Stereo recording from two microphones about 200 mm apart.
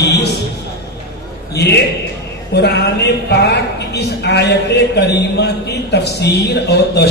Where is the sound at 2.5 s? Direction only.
55° left (ahead or behind).